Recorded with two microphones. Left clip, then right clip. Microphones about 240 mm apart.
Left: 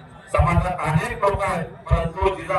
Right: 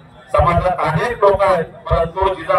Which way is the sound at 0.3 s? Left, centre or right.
Right.